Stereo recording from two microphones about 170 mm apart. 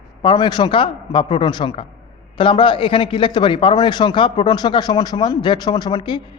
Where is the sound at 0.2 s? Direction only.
25° left (ahead or behind).